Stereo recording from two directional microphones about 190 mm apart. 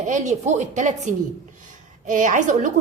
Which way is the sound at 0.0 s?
40° right (ahead or behind).